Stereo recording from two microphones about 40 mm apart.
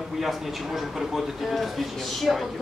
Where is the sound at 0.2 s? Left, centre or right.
Centre.